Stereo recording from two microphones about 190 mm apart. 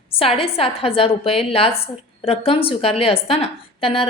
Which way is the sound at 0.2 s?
30° left (ahead or behind).